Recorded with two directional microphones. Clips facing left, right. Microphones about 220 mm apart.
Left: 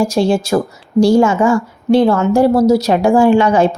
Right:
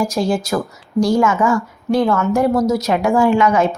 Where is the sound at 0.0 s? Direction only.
30° left (ahead or behind).